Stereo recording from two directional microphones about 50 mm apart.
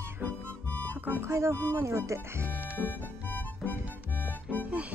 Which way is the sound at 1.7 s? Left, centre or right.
Right.